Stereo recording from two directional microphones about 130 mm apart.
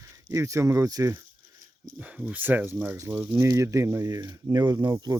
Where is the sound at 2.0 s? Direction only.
10° right (ahead or behind).